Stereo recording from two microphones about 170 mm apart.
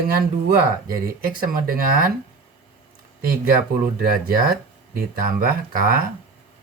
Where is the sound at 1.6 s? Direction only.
55° right (ahead or behind).